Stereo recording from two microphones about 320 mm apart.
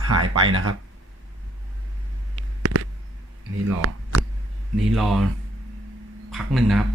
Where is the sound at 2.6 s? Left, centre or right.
Right.